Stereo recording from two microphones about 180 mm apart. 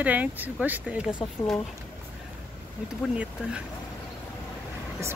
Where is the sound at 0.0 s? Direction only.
10° right (ahead or behind).